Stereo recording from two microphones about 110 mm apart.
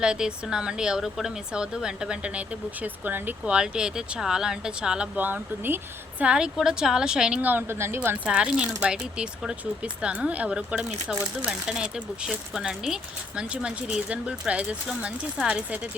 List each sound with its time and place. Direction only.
0.0 s a woman's voice: 10° right (ahead or behind)